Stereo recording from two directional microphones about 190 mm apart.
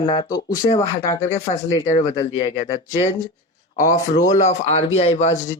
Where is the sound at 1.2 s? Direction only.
35° left (ahead or behind).